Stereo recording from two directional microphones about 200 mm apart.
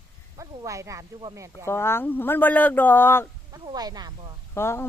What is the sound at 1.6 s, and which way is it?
Speech, 15° left (ahead or behind).